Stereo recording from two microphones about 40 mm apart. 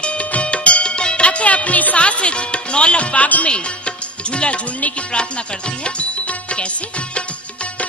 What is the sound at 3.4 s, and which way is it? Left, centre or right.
Music, left.